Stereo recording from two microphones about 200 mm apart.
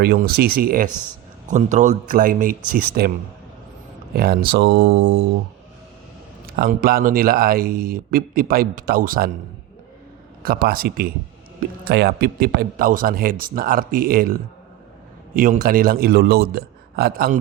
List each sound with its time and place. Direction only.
0.0 s a man's voice: 50° right (ahead or behind)
4.1 s a man's voice: 50° right (ahead or behind)
6.4 s a man's voice: 45° right (ahead or behind)
10.4 s a man's voice: 45° right (ahead or behind)
15.4 s a man's voice: 45° right (ahead or behind)